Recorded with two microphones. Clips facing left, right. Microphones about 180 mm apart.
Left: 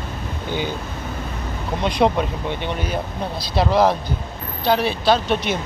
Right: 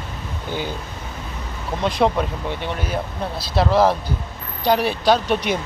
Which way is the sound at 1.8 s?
Centre (ahead or behind).